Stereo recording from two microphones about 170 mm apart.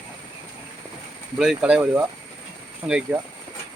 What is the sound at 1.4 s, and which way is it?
Speech, 5° right (ahead or behind).